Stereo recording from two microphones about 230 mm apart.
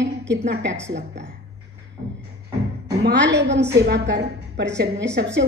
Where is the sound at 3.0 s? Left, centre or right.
Right.